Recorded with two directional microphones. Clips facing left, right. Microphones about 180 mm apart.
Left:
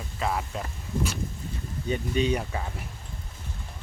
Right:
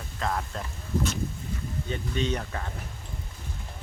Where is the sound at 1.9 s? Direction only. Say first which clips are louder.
Left 4 dB; 10° left (ahead or behind).